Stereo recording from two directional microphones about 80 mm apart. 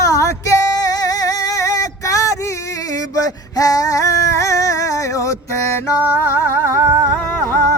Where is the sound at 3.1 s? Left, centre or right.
Left.